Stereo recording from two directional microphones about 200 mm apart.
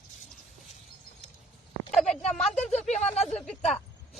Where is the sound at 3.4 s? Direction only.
Centre (ahead or behind).